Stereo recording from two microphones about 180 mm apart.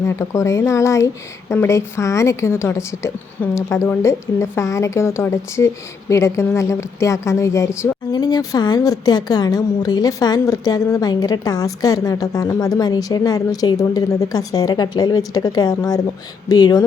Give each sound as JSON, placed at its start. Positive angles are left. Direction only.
{"t": 0.0, "sound": "speech", "side_deg": 15}